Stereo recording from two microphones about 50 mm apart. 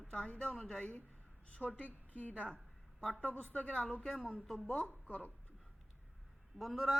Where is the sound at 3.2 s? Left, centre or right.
Left.